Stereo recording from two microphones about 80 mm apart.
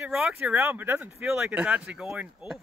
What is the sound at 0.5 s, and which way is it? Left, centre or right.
Speech, right.